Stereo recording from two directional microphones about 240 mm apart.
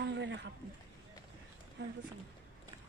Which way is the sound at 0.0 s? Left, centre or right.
Right.